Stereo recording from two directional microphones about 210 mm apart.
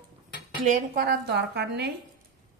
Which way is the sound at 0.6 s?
40° right (ahead or behind).